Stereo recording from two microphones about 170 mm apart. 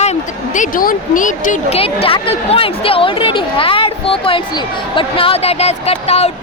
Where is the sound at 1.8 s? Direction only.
35° left (ahead or behind).